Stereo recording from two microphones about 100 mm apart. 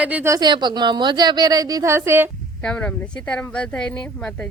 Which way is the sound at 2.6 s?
10° left (ahead or behind).